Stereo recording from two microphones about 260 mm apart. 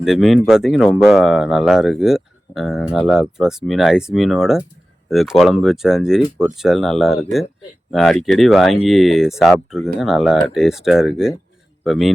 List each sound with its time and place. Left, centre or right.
0.0 s speech: centre